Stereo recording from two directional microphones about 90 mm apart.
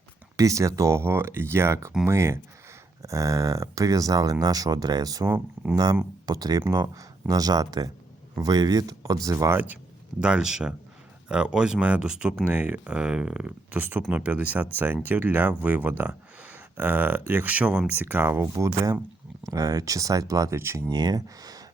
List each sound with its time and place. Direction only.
0.3 s speech: 35° right (ahead or behind)
9.5 s speech: 20° right (ahead or behind)
10.2 s speech: 10° right (ahead or behind); by 20.9 s 30° right (ahead or behind)
20.9 s speech: 45° right (ahead or behind)